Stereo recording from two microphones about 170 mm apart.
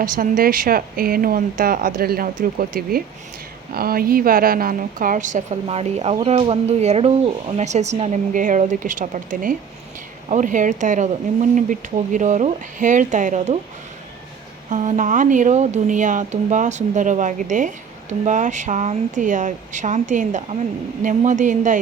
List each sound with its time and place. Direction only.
0.0 s speech: 55° right (ahead or behind)
14.7 s speech: 45° right (ahead or behind)